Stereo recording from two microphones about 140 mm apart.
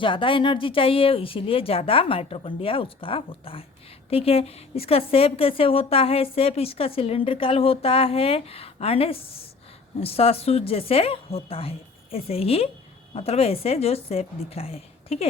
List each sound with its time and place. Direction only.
0.0 s a woman's voice: 35° left (ahead or behind)